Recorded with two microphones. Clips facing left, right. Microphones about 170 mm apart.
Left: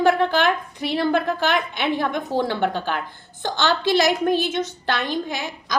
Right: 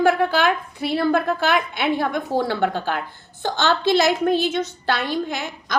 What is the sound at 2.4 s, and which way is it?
A woman's voice, 15° left (ahead or behind).